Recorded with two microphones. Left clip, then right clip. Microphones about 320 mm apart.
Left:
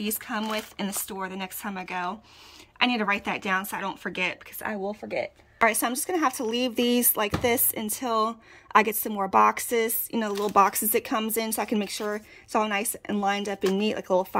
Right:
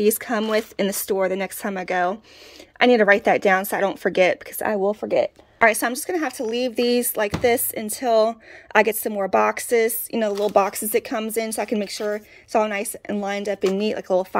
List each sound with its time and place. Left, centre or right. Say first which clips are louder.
0.0 s speech: right 10 dB; centre
5.6 s speech: right 5 dB; centre